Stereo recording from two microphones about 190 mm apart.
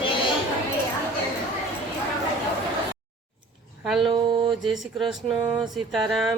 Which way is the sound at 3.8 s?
Centre (ahead or behind).